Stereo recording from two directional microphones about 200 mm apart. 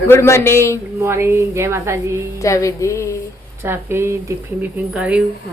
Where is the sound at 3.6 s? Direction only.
10° right (ahead or behind).